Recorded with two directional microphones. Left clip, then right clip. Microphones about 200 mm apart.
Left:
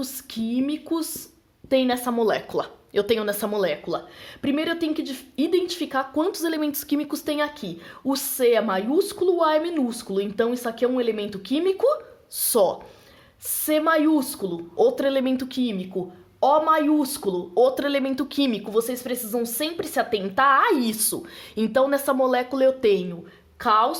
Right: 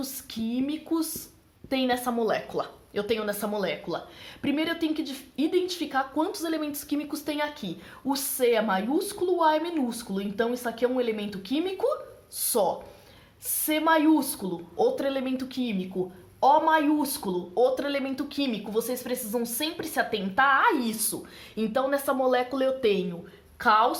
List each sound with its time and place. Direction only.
0.0 s a woman's voice: 30° left (ahead or behind)